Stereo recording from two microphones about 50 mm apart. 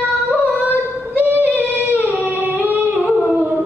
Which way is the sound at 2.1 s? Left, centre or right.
Left.